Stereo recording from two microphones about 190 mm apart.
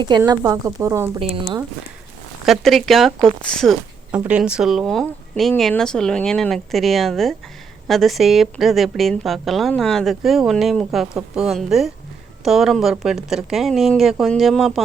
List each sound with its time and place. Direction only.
0.2 s speech: 15° right (ahead or behind)
1.2 s speech: 30° right (ahead or behind)
2.5 s a woman's voice: centre (ahead or behind)